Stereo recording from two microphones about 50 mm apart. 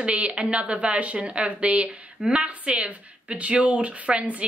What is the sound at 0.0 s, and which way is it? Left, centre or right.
Speech, right.